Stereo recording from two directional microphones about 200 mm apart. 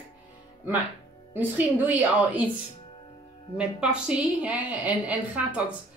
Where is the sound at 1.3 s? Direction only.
10° right (ahead or behind).